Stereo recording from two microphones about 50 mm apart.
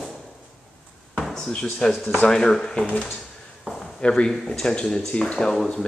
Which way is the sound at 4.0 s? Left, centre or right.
Centre.